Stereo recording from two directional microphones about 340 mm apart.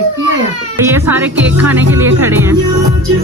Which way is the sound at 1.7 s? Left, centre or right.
Centre.